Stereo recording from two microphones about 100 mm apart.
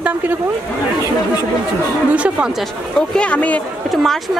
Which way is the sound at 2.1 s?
10° right (ahead or behind).